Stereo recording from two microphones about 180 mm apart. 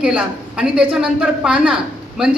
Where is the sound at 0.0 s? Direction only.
5° right (ahead or behind).